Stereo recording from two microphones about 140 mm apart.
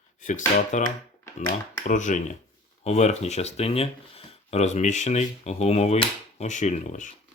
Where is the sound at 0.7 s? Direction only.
55° left (ahead or behind).